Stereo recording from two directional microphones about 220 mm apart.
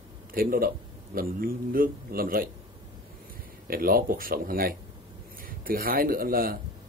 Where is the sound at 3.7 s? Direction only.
40° right (ahead or behind).